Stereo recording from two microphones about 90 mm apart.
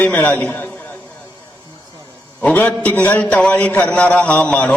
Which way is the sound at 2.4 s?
15° left (ahead or behind).